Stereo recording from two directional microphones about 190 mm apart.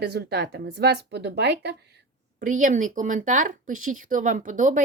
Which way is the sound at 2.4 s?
45° right (ahead or behind).